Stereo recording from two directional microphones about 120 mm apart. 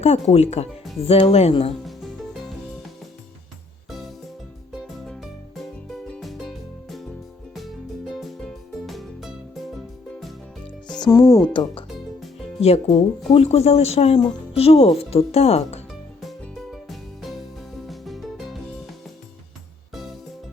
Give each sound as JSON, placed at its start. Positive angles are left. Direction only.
{"t": 0.0, "sound": "speech", "side_deg": 65}
{"t": 1.8, "sound": "music", "side_deg": 0}
{"t": 4.7, "sound": "music", "side_deg": 0}
{"t": 11.1, "sound": "speech", "side_deg": 25}
{"t": 11.5, "sound": "speech", "side_deg": 45}
{"t": 12.5, "sound": "speech", "side_deg": 60}
{"t": 16.7, "sound": "music", "side_deg": 0}